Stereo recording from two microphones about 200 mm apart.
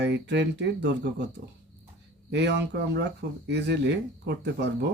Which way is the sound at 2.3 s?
60° right (ahead or behind).